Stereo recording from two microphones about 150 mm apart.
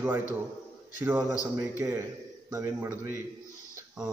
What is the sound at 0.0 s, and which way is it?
A man's voice, 15° right (ahead or behind).